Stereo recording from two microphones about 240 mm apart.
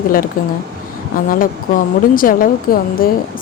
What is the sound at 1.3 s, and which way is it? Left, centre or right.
A woman's voice, left.